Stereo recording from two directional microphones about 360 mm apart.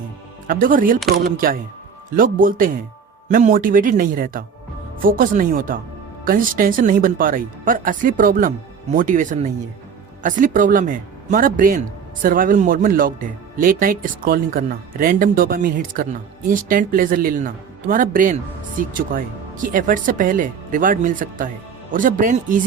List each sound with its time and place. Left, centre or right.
0.4 s speech: right